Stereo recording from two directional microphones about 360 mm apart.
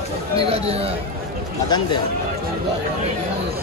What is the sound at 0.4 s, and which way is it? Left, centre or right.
Speech, centre.